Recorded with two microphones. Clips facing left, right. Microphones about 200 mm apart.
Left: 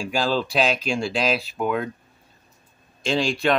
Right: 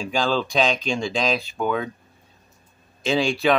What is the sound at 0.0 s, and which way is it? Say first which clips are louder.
Speech: even; 5° left (ahead or behind).